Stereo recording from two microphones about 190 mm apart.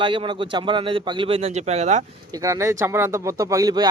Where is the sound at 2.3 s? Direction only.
15° right (ahead or behind).